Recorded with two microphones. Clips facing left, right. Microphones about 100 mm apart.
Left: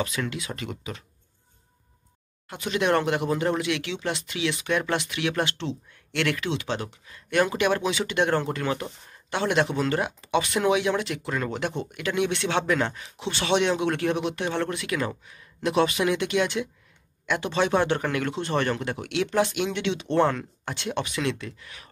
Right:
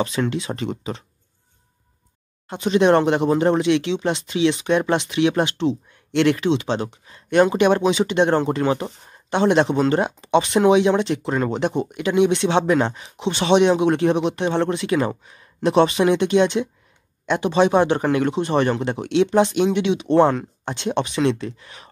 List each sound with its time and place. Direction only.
0.0 s speech: 30° right (ahead or behind)
2.4 s speech: 25° right (ahead or behind)